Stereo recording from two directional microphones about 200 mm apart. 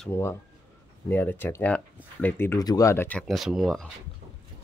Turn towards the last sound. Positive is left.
turn(degrees=0)  # may be behind; listen again after turning